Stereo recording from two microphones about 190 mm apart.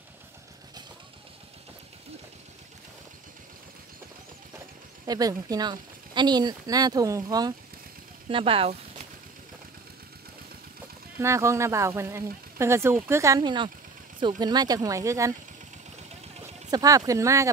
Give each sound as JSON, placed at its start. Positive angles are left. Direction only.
{"t": 5.0, "sound": "speech", "side_deg": -20}
{"t": 11.1, "sound": "speech", "side_deg": -15}
{"t": 16.7, "sound": "speech", "side_deg": -20}